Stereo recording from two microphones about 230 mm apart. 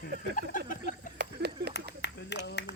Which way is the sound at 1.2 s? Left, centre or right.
Right.